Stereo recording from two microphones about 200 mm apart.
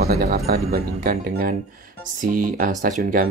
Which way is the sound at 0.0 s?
50° right (ahead or behind).